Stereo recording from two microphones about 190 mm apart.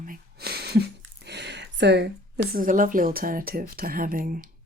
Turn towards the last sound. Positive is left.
turn(degrees=-45)  # may be behind; listen again after turning